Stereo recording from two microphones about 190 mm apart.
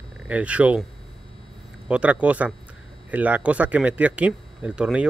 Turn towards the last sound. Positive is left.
turn(degrees=-5)  # may be behind; listen again after turning